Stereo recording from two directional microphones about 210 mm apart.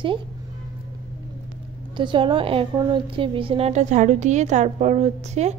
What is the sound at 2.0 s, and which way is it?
Speech, 25° right (ahead or behind).